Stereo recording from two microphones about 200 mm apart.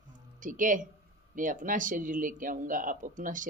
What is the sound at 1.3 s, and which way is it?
Speech, 40° right (ahead or behind).